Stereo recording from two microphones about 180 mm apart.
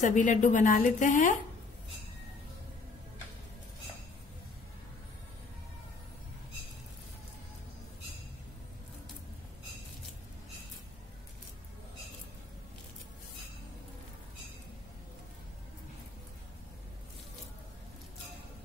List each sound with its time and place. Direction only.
0.0 s a woman's voice: 45° left (ahead or behind)